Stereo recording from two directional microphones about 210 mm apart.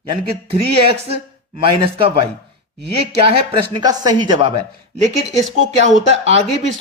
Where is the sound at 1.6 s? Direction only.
25° right (ahead or behind).